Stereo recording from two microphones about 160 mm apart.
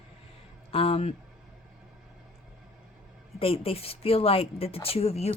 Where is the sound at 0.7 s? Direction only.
40° left (ahead or behind).